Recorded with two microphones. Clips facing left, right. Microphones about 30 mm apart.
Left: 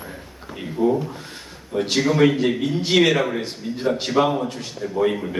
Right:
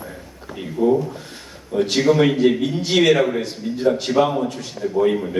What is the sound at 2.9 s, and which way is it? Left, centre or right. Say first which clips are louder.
Speech: right 2 dB; centre.